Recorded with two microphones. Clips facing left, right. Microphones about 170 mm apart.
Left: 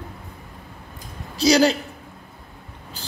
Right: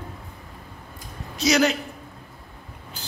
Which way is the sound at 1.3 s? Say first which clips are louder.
Left 4 dB; 35° left (ahead or behind).